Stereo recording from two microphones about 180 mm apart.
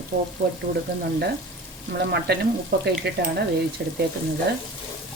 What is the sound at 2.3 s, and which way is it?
Speech, 65° right (ahead or behind).